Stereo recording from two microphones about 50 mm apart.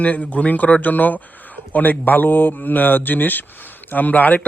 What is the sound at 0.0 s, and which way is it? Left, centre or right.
Speech, left.